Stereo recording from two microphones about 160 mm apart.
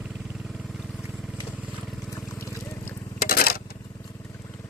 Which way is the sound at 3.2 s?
70° left (ahead or behind).